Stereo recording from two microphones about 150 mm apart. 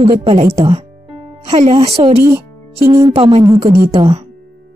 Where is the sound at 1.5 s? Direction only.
40° right (ahead or behind).